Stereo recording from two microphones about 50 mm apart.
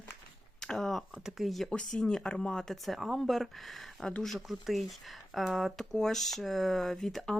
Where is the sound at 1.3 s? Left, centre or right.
Centre.